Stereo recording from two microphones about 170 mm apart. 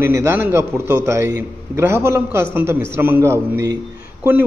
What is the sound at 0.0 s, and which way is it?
A man's voice, 15° right (ahead or behind).